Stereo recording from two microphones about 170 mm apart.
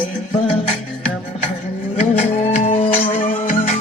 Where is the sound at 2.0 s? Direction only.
40° left (ahead or behind).